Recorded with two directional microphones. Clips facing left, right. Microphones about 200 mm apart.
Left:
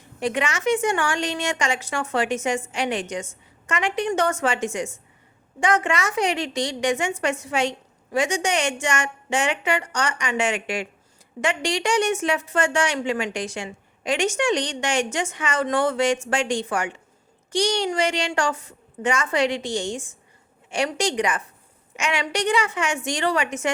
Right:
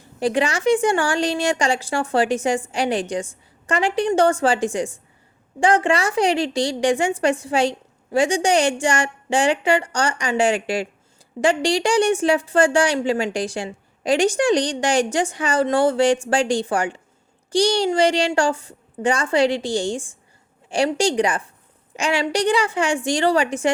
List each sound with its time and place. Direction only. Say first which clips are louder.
0.0 s a woman's voice: right 5 dB; 35° right (ahead or behind)